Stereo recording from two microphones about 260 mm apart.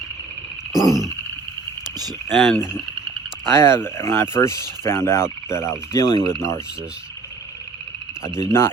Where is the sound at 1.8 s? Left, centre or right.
Centre.